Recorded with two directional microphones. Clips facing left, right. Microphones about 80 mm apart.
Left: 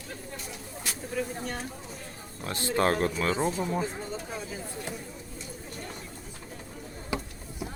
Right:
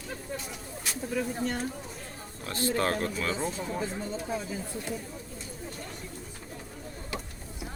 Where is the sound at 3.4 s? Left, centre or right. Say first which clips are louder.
Left 4 dB; centre.